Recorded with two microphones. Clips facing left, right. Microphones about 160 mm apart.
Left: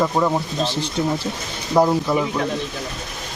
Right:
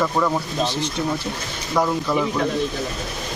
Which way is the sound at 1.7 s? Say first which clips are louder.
Left 4 dB; 25° left (ahead or behind).